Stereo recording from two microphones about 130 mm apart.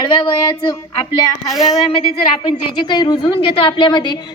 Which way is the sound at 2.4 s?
35° left (ahead or behind).